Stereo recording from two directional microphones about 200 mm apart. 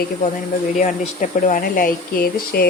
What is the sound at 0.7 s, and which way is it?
Speech, 40° left (ahead or behind).